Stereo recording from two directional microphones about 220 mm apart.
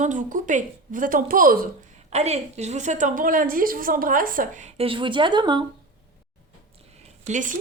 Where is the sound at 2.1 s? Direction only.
30° right (ahead or behind).